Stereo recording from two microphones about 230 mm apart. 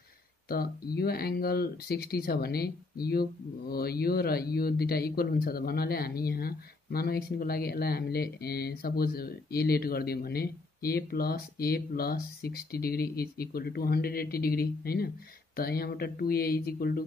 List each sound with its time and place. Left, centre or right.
0.5 s speech: left